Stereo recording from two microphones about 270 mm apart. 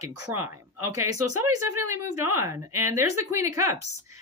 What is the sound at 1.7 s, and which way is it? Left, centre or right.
Speech, right.